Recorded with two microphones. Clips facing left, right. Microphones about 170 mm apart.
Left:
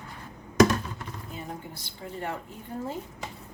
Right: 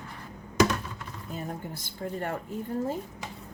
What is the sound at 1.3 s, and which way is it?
Speech, 50° right (ahead or behind).